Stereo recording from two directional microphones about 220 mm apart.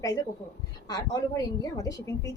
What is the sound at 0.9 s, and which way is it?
A woman's voice, 15° left (ahead or behind).